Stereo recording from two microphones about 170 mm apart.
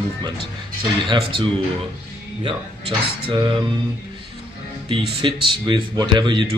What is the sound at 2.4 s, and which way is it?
Speech, 30° right (ahead or behind).